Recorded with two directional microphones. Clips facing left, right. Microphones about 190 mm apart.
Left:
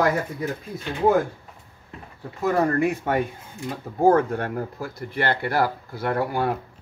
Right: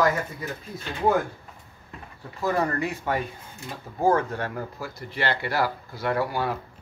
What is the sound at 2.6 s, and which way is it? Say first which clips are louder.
Speech: left 5 dB; 50° left (ahead or behind).